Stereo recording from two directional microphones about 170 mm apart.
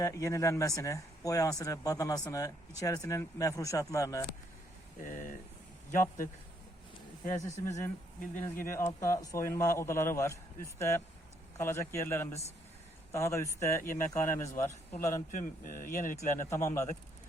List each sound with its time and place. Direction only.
0.0 s speech: 20° left (ahead or behind)
5.0 s speech: 50° left (ahead or behind)
7.3 s a man's voice: 20° left (ahead or behind)
15.3 s speech: 55° left (ahead or behind)
16.5 s a man's voice: 15° left (ahead or behind)